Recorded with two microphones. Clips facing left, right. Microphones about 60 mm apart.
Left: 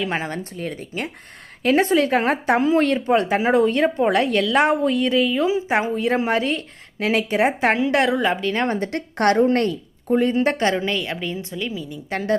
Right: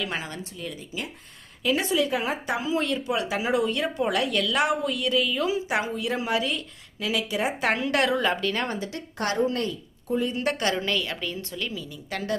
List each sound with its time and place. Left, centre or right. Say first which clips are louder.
0.0 s speech: left 7 dB; left
7.7 s a woman's voice: left 5 dB; left
8.8 s speech: left 10 dB; left
10.3 s a woman's voice: left 7 dB; left